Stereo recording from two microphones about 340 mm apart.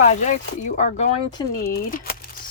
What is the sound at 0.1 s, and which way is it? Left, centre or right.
Speech, left.